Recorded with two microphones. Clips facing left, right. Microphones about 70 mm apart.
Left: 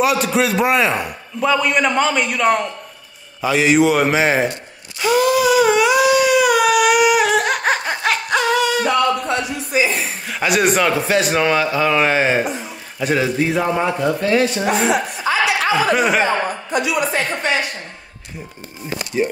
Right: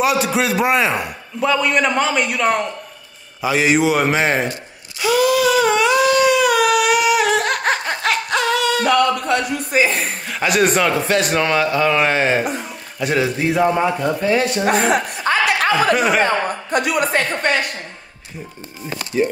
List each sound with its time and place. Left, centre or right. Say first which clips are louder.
0.0 s a man's voice: left 1 dB; centre
5.0 s a sound: even; left
5.4 s a sound: left 1 dB; centre
8.8 s a sound: right 1 dB; right
9.7 s chuckle: right 1 dB; right
10.2 s a man's voice: even; centre
14.7 s a woman's voice: right 1 dB; right
16.7 s a woman's voice: right 1 dB; right
19.1 s speech: right 1 dB; centre